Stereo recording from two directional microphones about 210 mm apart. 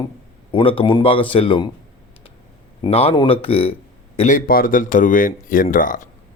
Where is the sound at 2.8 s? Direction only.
30° left (ahead or behind).